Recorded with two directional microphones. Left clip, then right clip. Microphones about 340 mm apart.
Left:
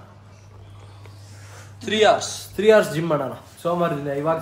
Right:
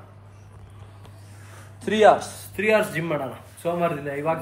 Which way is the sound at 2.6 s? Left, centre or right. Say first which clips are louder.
Left 5 dB; centre.